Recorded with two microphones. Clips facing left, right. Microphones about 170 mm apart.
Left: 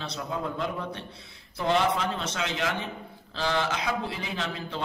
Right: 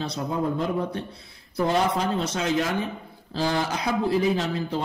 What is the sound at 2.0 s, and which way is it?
A man's voice, 35° right (ahead or behind).